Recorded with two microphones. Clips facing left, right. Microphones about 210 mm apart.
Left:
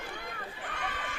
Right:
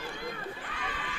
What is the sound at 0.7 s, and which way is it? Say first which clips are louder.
Neigh: left 1 dB; 45° left (ahead or behind).